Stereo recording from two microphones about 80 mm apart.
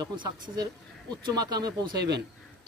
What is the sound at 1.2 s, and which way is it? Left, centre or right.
Speech, right.